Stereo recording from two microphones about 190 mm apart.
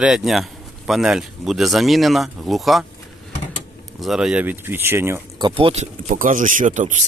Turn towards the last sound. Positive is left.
turn(degrees=-40)  # may be behind; listen again after turning